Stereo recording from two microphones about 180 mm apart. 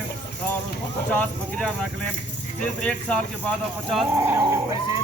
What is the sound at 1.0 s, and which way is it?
Speech, 5° left (ahead or behind).